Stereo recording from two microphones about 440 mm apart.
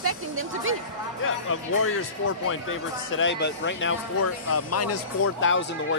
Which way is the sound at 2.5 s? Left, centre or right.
Left.